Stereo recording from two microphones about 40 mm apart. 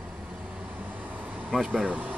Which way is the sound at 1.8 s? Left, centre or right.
Right.